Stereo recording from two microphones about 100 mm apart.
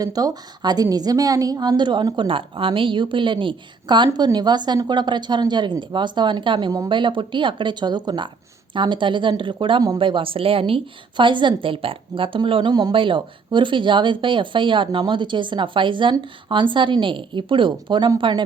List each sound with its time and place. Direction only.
0.0 s a woman's voice: 40° right (ahead or behind); by 18.4 s 55° right (ahead or behind)